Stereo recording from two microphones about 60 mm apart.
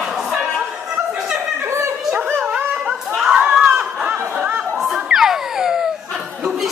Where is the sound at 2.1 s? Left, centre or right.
Right.